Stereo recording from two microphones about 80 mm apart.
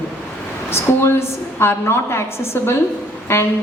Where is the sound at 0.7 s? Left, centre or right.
Left.